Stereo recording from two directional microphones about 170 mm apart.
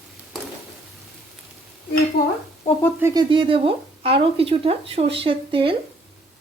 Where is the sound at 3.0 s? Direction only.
25° right (ahead or behind).